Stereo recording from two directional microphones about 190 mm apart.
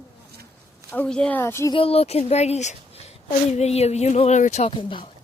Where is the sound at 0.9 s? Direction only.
5° left (ahead or behind).